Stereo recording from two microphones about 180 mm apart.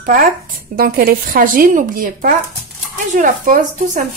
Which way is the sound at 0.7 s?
55° right (ahead or behind).